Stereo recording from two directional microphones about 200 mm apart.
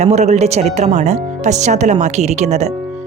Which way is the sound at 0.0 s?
35° right (ahead or behind).